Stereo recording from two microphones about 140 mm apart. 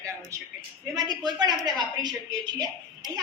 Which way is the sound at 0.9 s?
30° right (ahead or behind).